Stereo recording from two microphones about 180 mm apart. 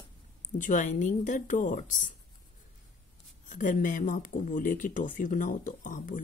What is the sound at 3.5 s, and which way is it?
Speech, 45° left (ahead or behind).